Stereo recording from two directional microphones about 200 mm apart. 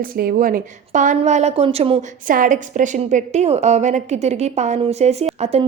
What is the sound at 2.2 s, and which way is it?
A woman's voice, 40° right (ahead or behind).